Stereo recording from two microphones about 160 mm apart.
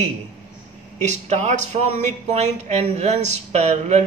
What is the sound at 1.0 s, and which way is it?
Speech, 45° right (ahead or behind).